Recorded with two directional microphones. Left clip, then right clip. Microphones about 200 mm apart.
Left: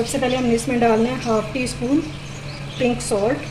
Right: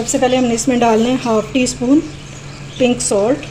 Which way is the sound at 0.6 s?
50° right (ahead or behind).